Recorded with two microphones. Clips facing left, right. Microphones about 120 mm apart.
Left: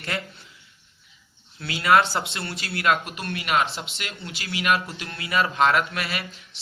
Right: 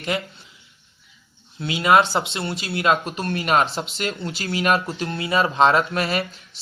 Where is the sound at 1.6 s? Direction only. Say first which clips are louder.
Right 2 dB; 20° right (ahead or behind).